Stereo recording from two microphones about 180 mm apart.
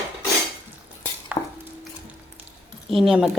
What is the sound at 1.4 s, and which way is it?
Chopping, 20° left (ahead or behind).